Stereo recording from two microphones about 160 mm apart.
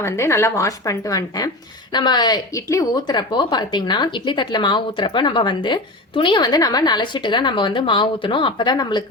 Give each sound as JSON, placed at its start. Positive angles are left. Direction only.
{"t": 0.0, "sound": "speech", "side_deg": 15}